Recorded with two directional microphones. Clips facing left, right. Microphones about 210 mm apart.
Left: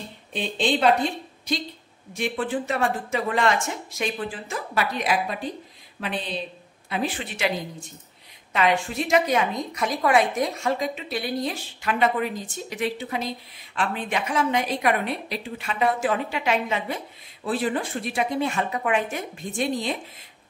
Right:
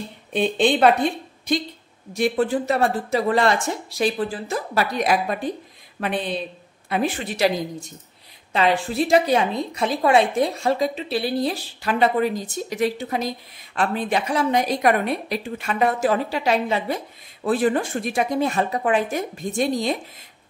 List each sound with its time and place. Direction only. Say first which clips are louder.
0.3 s a woman's voice: right 5 dB; 55° right (ahead or behind)
2.1 s a woman's voice: right 6 dB; 40° right (ahead or behind)
8.5 s a woman's voice: right 3 dB; 35° right (ahead or behind)
17.4 s a woman's voice: right 5 dB; 50° right (ahead or behind)